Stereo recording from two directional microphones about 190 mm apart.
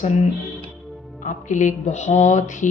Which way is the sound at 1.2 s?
40° left (ahead or behind).